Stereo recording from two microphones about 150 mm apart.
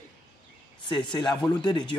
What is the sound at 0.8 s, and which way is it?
Speech, 30° left (ahead or behind).